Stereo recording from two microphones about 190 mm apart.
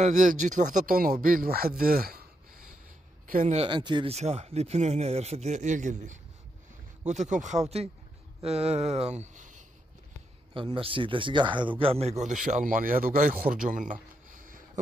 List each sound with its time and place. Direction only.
0.0 s speech: 40° right (ahead or behind)
3.6 s speech: 25° right (ahead or behind); by 9.7 s 40° right (ahead or behind)
10.5 s a man's voice: 25° right (ahead or behind); by 13.9 s 45° right (ahead or behind)
14.3 s a sound: 45° right (ahead or behind)